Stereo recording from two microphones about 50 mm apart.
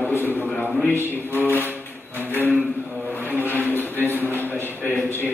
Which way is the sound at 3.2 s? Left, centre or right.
Left.